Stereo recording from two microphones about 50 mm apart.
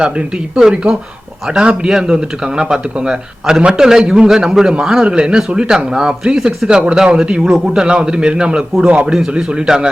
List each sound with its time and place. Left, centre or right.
0.5 s a man's voice: centre
9.3 s speech: centre